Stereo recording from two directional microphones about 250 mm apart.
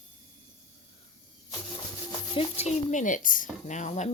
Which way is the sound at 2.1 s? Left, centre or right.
Left.